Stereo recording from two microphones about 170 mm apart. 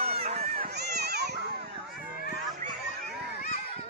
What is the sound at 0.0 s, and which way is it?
Run, 35° right (ahead or behind).